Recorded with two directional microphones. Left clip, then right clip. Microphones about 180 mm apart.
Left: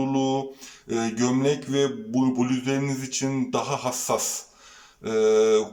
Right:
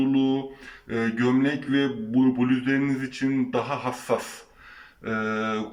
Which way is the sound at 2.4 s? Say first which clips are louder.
Right 1 dB; 20° left (ahead or behind).